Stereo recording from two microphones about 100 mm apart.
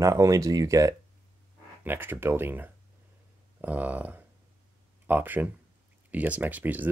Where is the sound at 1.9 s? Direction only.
20° right (ahead or behind).